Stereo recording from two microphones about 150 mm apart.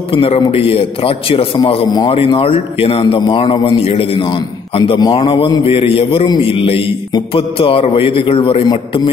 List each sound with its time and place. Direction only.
0.1 s a man's voice: 35° left (ahead or behind)